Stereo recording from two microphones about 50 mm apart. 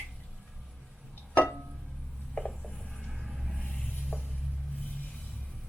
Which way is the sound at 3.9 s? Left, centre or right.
Centre.